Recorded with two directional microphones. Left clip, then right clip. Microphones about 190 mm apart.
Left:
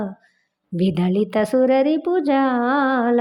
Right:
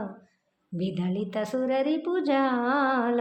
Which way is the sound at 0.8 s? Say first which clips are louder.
Left 11 dB; 40° left (ahead or behind).